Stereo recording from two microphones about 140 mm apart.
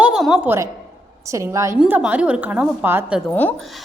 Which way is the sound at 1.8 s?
10° right (ahead or behind).